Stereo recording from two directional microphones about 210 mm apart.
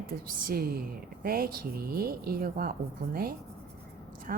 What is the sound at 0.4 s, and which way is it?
Speech, 45° right (ahead or behind).